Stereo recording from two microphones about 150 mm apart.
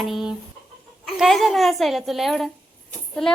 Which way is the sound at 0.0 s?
Centre (ahead or behind).